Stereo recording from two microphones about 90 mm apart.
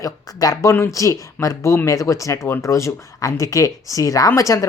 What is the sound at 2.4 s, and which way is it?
Speech, 25° left (ahead or behind).